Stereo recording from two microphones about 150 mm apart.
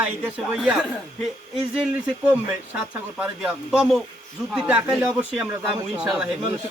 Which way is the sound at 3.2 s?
5° right (ahead or behind).